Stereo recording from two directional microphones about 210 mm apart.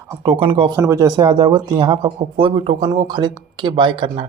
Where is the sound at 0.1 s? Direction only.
25° right (ahead or behind).